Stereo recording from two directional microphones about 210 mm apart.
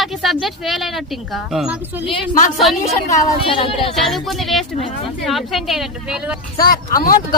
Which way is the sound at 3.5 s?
25° left (ahead or behind).